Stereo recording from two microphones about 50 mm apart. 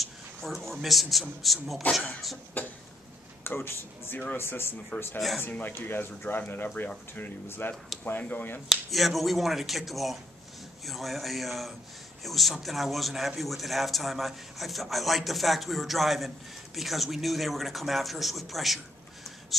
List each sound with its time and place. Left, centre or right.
0.0 s a man's voice: centre
2.6 s speech: left
3.4 s speech: left
5.5 s speech: left
5.8 s speech: left
8.0 s speech: left
8.6 s a man's voice: centre